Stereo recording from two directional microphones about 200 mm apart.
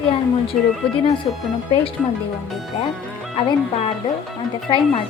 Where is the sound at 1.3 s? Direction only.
30° left (ahead or behind).